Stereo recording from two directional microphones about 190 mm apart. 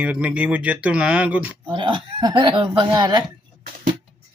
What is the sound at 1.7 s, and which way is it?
Speech, 25° right (ahead or behind).